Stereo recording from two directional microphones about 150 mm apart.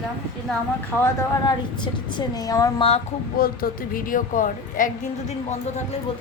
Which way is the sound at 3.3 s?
75° left (ahead or behind).